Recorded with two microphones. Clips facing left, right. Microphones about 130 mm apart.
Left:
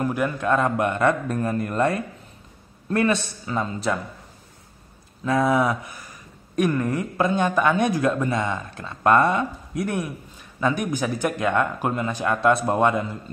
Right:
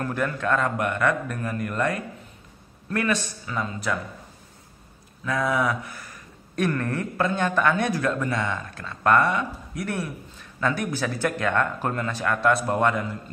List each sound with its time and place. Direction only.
0.0 s speech: 15° left (ahead or behind)
5.2 s speech: 25° left (ahead or behind)